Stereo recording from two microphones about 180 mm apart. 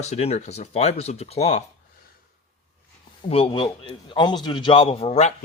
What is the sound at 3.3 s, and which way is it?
Speech, 30° left (ahead or behind).